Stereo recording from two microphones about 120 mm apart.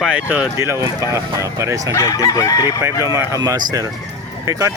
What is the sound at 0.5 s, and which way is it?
Speech, 20° right (ahead or behind).